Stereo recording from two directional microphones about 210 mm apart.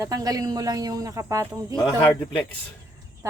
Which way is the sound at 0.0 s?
15° right (ahead or behind).